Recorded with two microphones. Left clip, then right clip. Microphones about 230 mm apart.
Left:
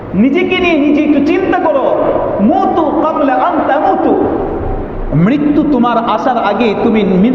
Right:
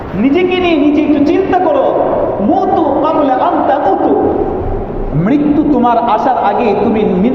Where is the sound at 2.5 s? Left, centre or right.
Left.